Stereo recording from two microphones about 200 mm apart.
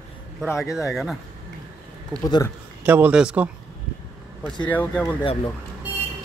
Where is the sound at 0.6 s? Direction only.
Centre (ahead or behind).